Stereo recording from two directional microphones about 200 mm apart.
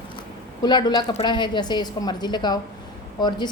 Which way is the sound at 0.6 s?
20° left (ahead or behind).